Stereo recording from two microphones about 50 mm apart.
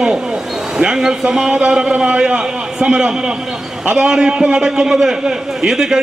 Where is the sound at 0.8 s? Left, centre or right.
Centre.